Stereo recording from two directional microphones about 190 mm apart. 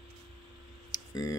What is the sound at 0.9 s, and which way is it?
Clicking, 20° left (ahead or behind).